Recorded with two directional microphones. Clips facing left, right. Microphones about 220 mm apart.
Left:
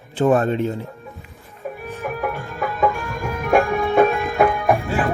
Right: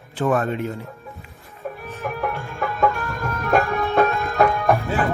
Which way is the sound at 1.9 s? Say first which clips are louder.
Left 1 dB; 10° left (ahead or behind).